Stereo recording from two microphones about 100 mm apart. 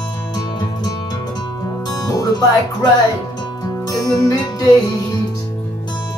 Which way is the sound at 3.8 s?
40° left (ahead or behind).